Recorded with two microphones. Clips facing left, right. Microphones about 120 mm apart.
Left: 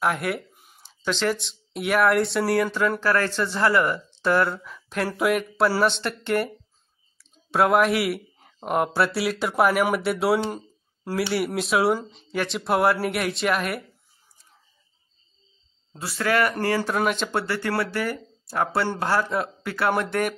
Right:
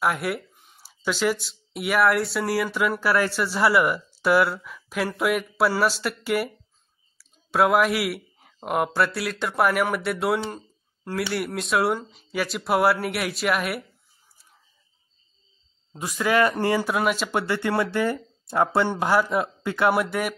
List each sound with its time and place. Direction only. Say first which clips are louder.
0.0 s a sound: even; centre (ahead or behind)
0.8 s speech: right 1 dB; 10° right (ahead or behind)
15.9 s speech: right 1 dB; 15° right (ahead or behind)
16.9 s speech: even; 5° right (ahead or behind)
17.3 s speech: right 1 dB; 15° right (ahead or behind)
19.9 s speech: left 3 dB; 5° right (ahead or behind)